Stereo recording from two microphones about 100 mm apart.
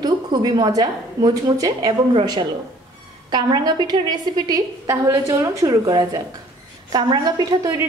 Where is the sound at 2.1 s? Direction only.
50° right (ahead or behind).